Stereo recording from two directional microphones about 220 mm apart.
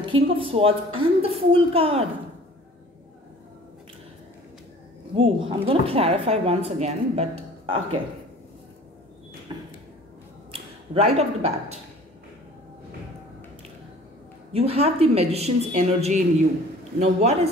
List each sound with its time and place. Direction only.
0.0 s a woman's voice: 25° right (ahead or behind)
5.1 s a woman's voice: 25° right (ahead or behind)
10.5 s speech: 30° right (ahead or behind)
14.5 s a woman's voice: 25° right (ahead or behind)